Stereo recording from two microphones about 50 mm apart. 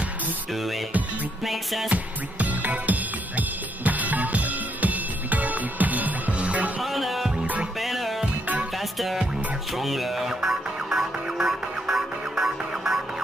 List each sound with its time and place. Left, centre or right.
1.4 s music: centre
1.9 s music: right
6.8 s music: centre